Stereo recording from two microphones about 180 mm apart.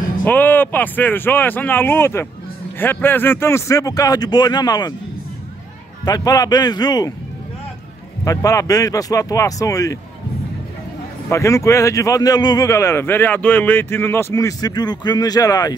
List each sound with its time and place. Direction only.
0.2 s a man's voice: 10° left (ahead or behind)
6.0 s a man's voice: 20° left (ahead or behind)
8.2 s a man's voice: 20° left (ahead or behind)
11.2 s speech: 15° left (ahead or behind)